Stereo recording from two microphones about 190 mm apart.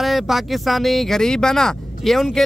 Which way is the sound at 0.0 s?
Centre (ahead or behind).